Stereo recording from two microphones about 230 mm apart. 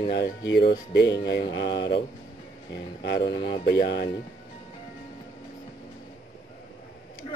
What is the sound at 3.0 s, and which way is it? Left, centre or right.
Speech, left.